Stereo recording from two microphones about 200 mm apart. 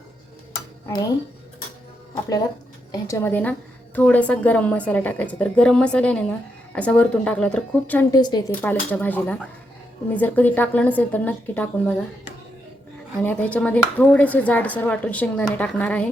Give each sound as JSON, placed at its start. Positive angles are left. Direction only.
{"t": 2.9, "sound": "speech", "side_deg": 15}
{"t": 8.1, "sound": "a woman's voice", "side_deg": 20}
{"t": 8.6, "sound": "speech", "side_deg": 10}
{"t": 13.2, "sound": "speech", "side_deg": 5}